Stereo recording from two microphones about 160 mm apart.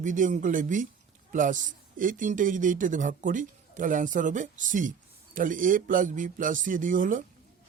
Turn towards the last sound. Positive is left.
turn(degrees=-55)  # may be behind; listen again after turning